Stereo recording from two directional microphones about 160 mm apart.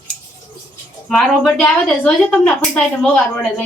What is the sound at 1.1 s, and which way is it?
Speech, 5° left (ahead or behind).